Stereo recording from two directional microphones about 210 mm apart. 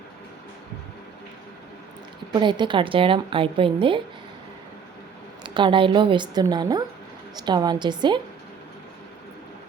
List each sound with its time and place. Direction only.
2.3 s a woman's voice: 20° right (ahead or behind)
5.4 s a woman's voice: 20° right (ahead or behind)